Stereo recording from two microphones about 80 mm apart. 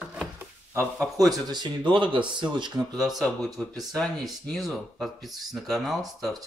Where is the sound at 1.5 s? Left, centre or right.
Right.